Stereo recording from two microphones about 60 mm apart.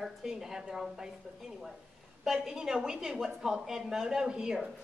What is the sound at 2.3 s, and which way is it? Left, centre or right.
A woman's voice, centre.